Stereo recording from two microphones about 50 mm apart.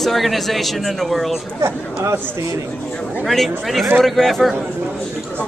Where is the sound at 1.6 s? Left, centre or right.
Right.